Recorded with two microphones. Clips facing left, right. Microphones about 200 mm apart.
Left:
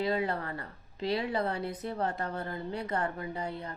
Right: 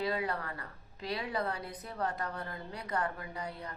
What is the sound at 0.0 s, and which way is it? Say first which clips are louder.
A woman's voice: left 4 dB; 25° left (ahead or behind).